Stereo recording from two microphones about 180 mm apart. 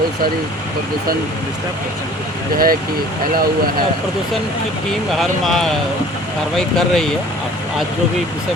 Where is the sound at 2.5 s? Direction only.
55° right (ahead or behind).